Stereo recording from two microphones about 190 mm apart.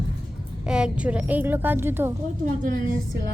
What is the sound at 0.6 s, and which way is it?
A woman's voice, 5° right (ahead or behind).